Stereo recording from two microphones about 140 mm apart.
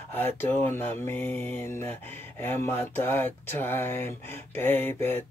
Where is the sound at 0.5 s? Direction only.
15° left (ahead or behind).